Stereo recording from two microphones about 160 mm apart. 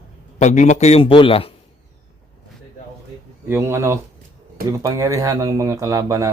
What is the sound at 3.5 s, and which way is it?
Speech, 15° right (ahead or behind).